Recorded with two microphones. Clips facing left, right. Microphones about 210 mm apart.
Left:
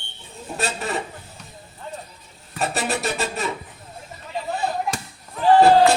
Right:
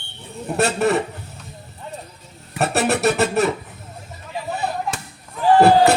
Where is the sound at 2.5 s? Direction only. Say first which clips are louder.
Right 5 dB; 65° right (ahead or behind).